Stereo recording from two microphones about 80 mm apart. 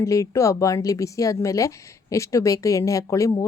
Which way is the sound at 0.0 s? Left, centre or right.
Left.